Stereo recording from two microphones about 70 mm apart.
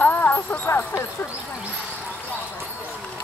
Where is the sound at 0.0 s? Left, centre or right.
Left.